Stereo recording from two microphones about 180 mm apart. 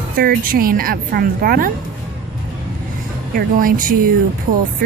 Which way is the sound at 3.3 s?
50° right (ahead or behind).